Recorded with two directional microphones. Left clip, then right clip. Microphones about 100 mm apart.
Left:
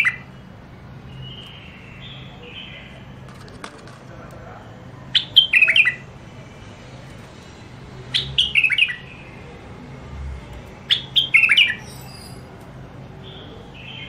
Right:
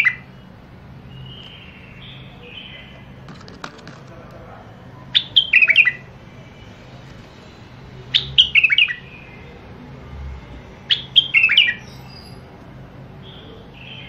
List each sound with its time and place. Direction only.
5.1 s bird: 30° right (ahead or behind)
8.1 s bird: 90° right
10.9 s bird: 15° right (ahead or behind)